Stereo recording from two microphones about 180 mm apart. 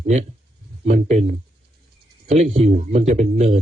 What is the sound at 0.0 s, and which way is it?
A man's voice, 40° right (ahead or behind).